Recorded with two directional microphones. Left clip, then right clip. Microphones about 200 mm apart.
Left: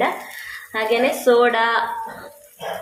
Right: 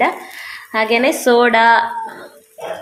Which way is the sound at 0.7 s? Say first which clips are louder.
Right 4 dB; 45° right (ahead or behind).